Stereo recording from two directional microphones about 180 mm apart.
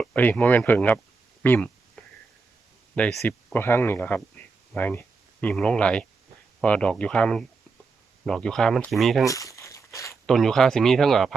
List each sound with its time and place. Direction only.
0.0 s speech: 10° left (ahead or behind)
2.9 s speech: 5° left (ahead or behind)
9.2 s crumpling: 15° left (ahead or behind)
10.2 s speech: centre (ahead or behind)